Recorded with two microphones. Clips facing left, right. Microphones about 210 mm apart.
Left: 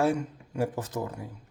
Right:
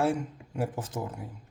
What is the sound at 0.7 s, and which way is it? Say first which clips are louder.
Speech: left 2 dB; 35° left (ahead or behind).